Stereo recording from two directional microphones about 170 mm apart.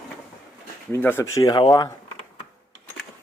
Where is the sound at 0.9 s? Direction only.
15° left (ahead or behind).